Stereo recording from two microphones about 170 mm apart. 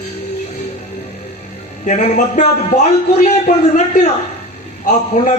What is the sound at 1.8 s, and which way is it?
A man's voice, 45° left (ahead or behind).